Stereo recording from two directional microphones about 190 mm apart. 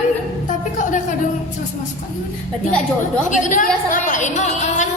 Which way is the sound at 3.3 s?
40° left (ahead or behind).